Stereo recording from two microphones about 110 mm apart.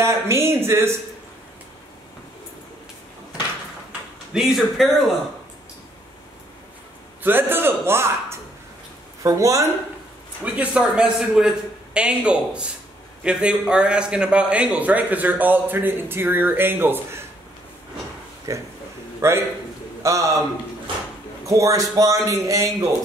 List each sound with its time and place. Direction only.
0.0 s speech: 25° right (ahead or behind)
4.3 s speech: 5° right (ahead or behind)
7.2 s speech: 20° right (ahead or behind)
10.4 s a man's voice: 10° right (ahead or behind)
18.5 s speech: 30° right (ahead or behind)
21.5 s speech: 30° right (ahead or behind)